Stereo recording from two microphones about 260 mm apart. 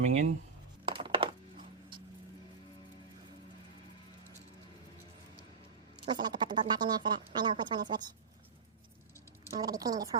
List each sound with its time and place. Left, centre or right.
0.0 s speech: right
0.9 s music: centre
6.1 s a woman's voice: centre
9.6 s a woman's voice: centre